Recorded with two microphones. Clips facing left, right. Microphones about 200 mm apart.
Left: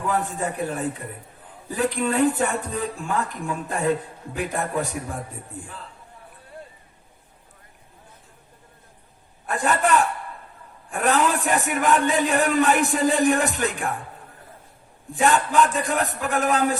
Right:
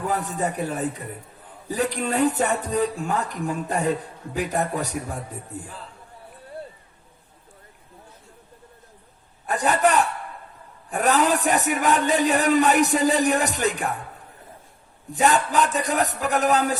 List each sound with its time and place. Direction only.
0.3 s speech: 40° right (ahead or behind)
9.5 s speech: 40° right (ahead or behind)
15.1 s speech: 40° right (ahead or behind)